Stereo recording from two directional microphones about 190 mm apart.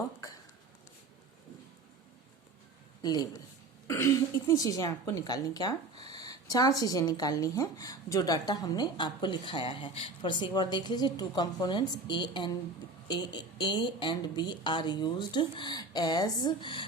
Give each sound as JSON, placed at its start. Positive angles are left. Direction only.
{"t": 3.0, "sound": "a woman's voice", "side_deg": 20}